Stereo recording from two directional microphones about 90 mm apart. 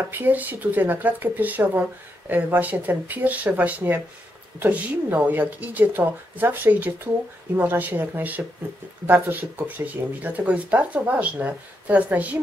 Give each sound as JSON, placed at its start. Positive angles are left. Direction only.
{"t": 0.1, "sound": "speech", "side_deg": -20}